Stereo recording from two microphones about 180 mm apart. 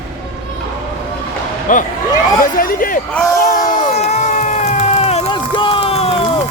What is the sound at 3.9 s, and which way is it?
Crowd, 40° left (ahead or behind).